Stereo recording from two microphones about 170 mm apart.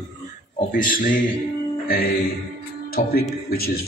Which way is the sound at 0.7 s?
55° left (ahead or behind).